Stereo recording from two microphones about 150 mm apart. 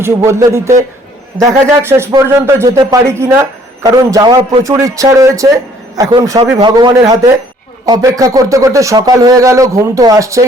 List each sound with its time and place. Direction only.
0.0 s speech: 20° right (ahead or behind)